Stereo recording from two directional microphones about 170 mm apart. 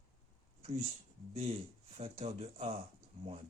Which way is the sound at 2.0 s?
40° right (ahead or behind).